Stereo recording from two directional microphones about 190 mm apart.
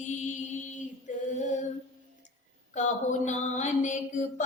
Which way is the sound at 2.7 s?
40° left (ahead or behind).